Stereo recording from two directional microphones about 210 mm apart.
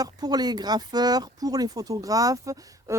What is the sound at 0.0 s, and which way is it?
Speech, 20° right (ahead or behind).